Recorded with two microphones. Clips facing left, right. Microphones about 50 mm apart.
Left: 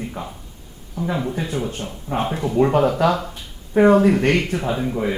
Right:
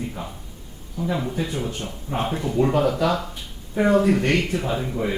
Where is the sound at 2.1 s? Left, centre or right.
Centre; by 3.9 s left.